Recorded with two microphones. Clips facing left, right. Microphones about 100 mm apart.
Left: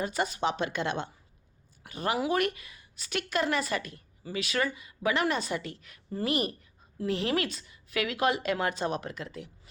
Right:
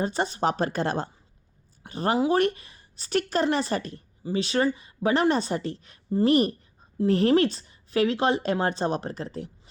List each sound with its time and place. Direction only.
0.0 s a woman's voice: 30° right (ahead or behind)